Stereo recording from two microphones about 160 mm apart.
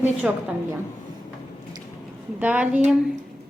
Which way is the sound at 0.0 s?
10° right (ahead or behind).